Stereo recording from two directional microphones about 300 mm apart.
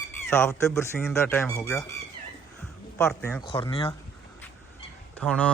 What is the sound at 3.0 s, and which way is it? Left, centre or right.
Speech, centre.